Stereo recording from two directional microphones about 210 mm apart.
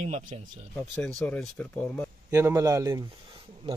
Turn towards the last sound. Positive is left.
turn(degrees=-25)  # may be behind; listen again after turning